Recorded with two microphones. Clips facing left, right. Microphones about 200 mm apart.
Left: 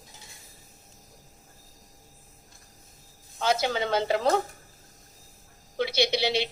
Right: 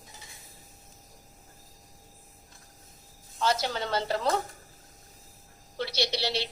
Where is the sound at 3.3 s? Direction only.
55° left (ahead or behind).